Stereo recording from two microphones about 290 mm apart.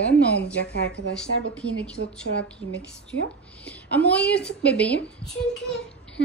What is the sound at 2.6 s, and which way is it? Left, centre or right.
Speech, right.